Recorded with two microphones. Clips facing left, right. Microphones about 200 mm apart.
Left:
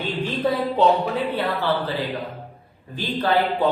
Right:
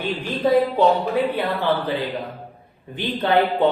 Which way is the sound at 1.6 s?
20° right (ahead or behind).